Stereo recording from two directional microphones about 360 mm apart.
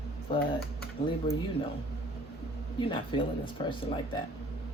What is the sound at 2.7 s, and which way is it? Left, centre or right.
Speech, centre.